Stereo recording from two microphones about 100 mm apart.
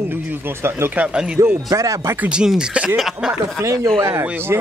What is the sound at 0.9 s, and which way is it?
Speech, 15° right (ahead or behind).